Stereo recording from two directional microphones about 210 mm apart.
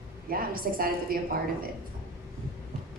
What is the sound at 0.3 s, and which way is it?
Speech, 45° right (ahead or behind).